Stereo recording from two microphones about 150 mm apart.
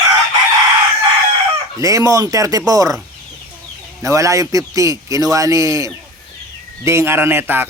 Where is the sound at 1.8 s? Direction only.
25° right (ahead or behind).